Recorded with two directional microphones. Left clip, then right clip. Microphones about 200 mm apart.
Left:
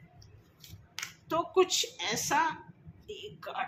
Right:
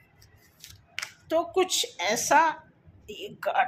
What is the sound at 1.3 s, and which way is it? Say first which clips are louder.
A woman's voice: right 2 dB; 25° right (ahead or behind).